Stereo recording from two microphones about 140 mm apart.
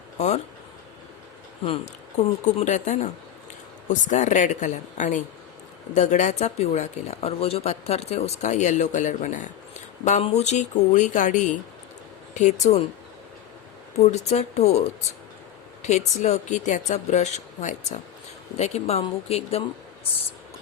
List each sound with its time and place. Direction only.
0.2 s speech: 55° left (ahead or behind)
2.4 s speech: 60° left (ahead or behind)
14.0 s speech: 50° left (ahead or behind)
15.8 s speech: 55° left (ahead or behind)